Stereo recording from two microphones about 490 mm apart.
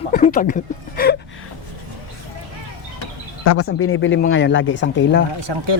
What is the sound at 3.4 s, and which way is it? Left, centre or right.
Speech, left.